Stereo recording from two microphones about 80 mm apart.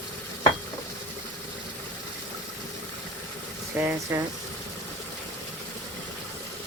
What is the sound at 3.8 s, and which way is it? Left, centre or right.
Speech, right.